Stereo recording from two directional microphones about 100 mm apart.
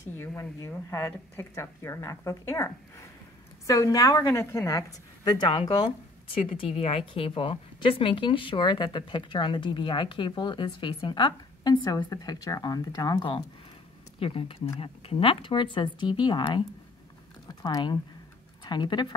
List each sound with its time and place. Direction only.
0.0 s a woman's voice: 25° left (ahead or behind)
4.3 s a woman's voice: 25° left (ahead or behind)
4.6 s speech: 40° left (ahead or behind)
6.8 s speech: 70° left (ahead or behind); by 13.4 s 45° left (ahead or behind)
14.2 s speech: 70° left (ahead or behind); by 19.1 s 50° left (ahead or behind)